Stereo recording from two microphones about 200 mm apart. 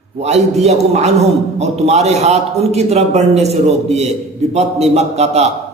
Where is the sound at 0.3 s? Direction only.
35° right (ahead or behind).